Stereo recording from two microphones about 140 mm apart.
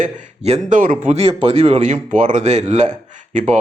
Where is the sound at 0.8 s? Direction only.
75° right (ahead or behind).